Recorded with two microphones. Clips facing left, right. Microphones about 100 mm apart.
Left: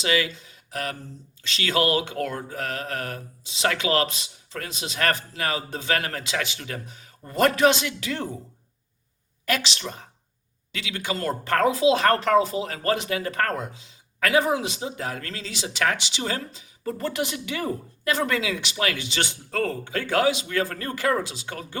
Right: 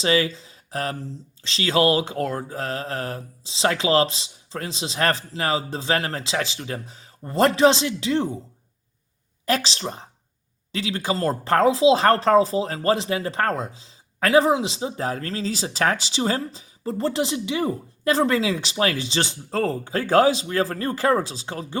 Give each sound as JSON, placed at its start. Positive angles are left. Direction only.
{"t": 0.0, "sound": "speech", "side_deg": -35}
{"t": 9.5, "sound": "speech", "side_deg": -35}